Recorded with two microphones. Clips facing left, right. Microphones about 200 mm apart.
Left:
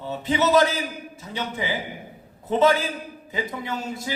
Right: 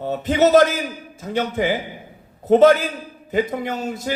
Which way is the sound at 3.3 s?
55° right (ahead or behind).